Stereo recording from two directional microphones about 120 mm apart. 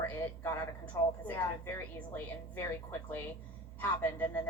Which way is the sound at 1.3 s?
15° left (ahead or behind).